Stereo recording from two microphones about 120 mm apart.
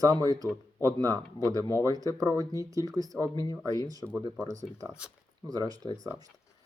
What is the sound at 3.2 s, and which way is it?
Speech, 30° left (ahead or behind).